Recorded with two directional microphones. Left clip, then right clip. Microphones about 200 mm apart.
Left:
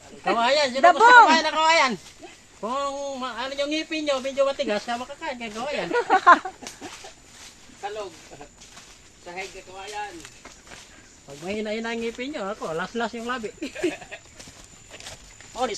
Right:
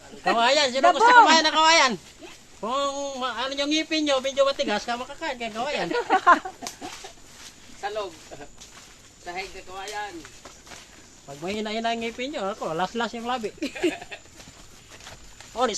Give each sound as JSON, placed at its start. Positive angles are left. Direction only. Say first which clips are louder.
{"t": 0.3, "sound": "a man's voice", "louder": "right 1 dB", "side_deg": -10}
{"t": 0.9, "sound": "speech", "louder": "left 3 dB", "side_deg": 35}
{"t": 1.3, "sound": "a man's voice", "louder": "right 1 dB", "side_deg": -10}
{"t": 5.9, "sound": "speech", "louder": "left 3 dB", "side_deg": 30}
{"t": 11.4, "sound": "a man's voice", "louder": "right 2 dB", "side_deg": -5}